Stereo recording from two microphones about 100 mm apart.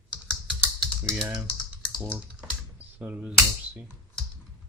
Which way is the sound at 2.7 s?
15° right (ahead or behind).